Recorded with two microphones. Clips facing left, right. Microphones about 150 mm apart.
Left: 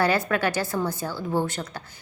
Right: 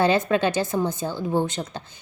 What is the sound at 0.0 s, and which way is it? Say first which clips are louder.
A woman's voice: right 3 dB; 20° right (ahead or behind).